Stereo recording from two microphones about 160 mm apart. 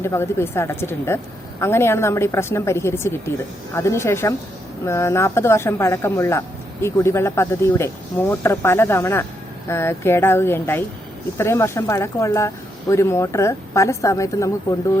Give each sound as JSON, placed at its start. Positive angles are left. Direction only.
{"t": 0.0, "sound": "a woman's voice", "side_deg": 15}